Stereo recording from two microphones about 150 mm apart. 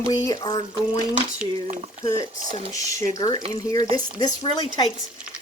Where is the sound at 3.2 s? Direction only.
25° left (ahead or behind).